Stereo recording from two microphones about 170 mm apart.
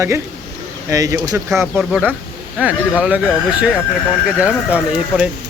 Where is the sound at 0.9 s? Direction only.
20° right (ahead or behind).